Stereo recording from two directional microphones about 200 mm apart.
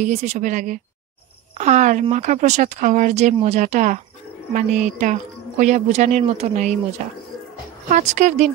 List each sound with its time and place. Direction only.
0.0 s a woman's voice: 35° right (ahead or behind)